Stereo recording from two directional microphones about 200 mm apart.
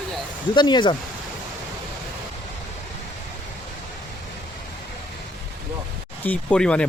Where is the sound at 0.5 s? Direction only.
25° left (ahead or behind).